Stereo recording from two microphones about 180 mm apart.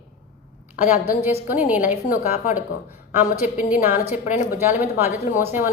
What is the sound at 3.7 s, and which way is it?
Speech, 10° right (ahead or behind).